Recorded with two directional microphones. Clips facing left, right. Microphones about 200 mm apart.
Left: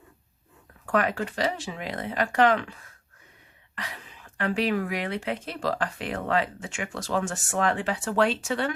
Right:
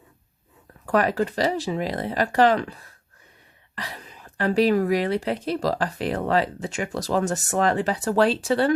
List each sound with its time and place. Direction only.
0.9 s a woman's voice: 35° right (ahead or behind)